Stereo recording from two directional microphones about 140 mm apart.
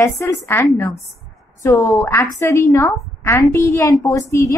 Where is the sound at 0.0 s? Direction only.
20° left (ahead or behind).